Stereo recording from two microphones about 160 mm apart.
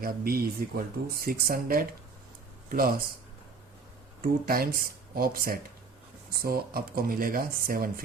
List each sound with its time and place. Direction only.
0.0 s speech: 70° right (ahead or behind)
4.2 s speech: 65° right (ahead or behind)